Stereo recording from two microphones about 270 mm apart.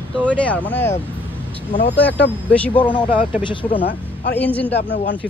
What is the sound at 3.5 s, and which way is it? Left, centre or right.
Speech, centre.